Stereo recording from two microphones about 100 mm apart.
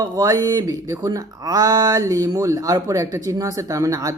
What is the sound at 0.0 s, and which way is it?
Speech, 35° right (ahead or behind).